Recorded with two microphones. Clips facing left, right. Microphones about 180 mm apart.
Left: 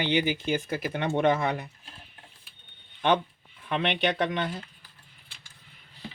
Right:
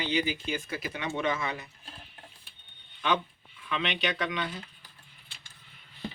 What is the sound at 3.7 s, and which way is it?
Speech, 55° left (ahead or behind).